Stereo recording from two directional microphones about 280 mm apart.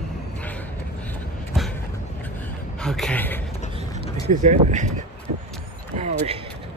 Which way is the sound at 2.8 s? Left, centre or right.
Centre.